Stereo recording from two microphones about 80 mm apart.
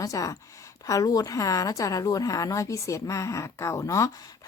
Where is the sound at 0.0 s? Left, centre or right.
Left.